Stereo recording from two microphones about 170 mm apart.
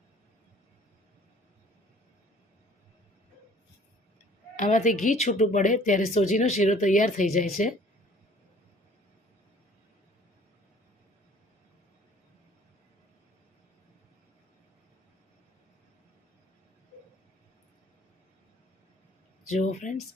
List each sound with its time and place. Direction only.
4.5 s speech: 50° left (ahead or behind)
19.5 s speech: 45° left (ahead or behind)